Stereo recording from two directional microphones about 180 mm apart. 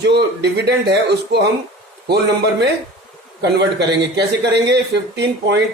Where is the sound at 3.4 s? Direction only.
70° right (ahead or behind).